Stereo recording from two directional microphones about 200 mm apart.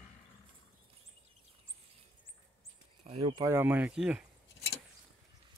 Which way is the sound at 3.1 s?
25° right (ahead or behind).